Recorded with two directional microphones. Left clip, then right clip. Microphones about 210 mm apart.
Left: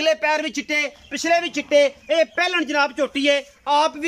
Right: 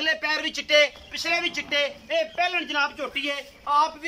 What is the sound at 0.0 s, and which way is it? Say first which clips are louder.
A man's voice: left 5 dB; 55° left (ahead or behind).